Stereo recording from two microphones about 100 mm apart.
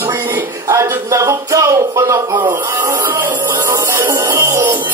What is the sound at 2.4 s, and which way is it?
Music, 20° right (ahead or behind).